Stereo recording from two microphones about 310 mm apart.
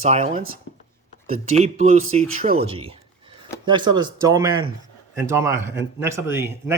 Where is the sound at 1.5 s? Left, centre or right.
Right.